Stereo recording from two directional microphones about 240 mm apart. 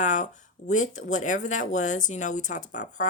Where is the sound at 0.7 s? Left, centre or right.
Left.